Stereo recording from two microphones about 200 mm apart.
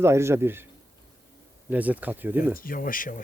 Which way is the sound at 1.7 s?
10° right (ahead or behind).